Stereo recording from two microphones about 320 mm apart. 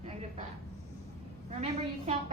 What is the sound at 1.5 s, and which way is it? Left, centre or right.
Speech, centre.